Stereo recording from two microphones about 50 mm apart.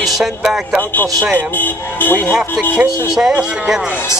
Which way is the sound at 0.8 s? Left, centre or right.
Left.